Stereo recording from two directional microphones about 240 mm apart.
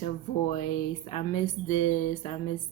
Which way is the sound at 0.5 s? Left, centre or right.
Left.